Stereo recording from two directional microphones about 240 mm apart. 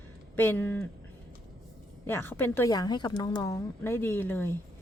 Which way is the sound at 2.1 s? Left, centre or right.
Centre.